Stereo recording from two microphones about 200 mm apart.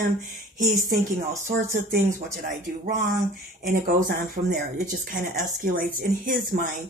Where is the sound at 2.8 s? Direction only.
40° right (ahead or behind).